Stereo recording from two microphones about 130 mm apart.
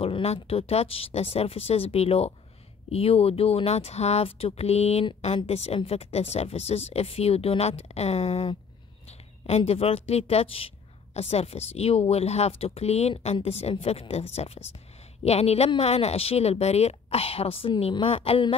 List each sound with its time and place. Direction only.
0.0 s a woman's voice: 50° left (ahead or behind)